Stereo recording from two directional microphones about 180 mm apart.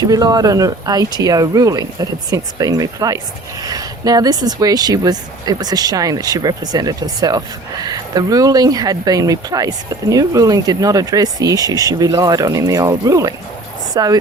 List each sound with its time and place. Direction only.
0.1 s speech: 20° right (ahead or behind)